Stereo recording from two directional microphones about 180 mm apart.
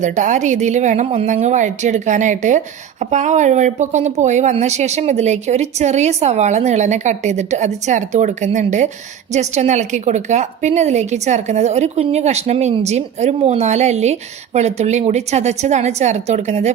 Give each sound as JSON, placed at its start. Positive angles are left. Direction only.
{"t": 0.0, "sound": "a woman's voice", "side_deg": -45}